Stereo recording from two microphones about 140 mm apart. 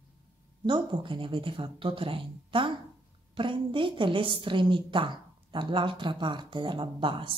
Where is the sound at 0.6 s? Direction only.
35° right (ahead or behind).